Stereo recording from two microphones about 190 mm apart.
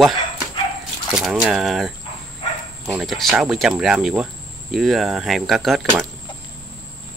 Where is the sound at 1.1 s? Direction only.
5° right (ahead or behind).